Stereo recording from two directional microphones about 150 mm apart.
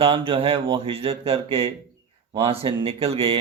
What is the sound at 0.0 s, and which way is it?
Speech, 35° right (ahead or behind).